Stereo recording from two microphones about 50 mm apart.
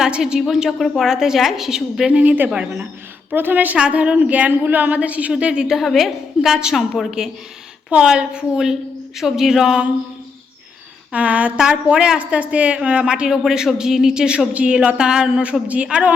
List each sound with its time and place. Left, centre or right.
0.2 s a woman's voice: centre
2.1 s speech: right
3.3 s a woman's voice: right
3.8 s speech: right
5.6 s a woman's voice: centre
7.9 s a woman's voice: centre
11.1 s a woman's voice: right